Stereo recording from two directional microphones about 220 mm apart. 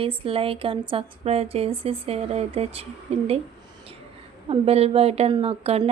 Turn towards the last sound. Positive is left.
turn(degrees=-25)  # may be behind; listen again after turning